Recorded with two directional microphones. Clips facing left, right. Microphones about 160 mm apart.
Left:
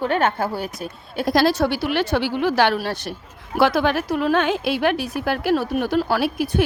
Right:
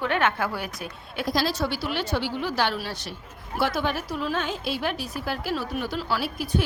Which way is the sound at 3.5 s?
85° left.